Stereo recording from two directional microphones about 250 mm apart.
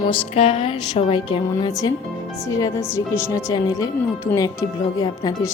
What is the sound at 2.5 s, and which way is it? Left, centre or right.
Speech, centre.